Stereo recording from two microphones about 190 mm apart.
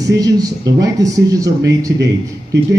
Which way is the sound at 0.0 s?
20° right (ahead or behind).